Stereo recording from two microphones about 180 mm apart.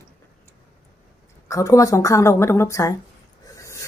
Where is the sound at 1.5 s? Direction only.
15° left (ahead or behind).